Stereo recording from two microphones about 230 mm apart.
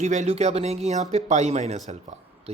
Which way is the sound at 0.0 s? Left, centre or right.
Right.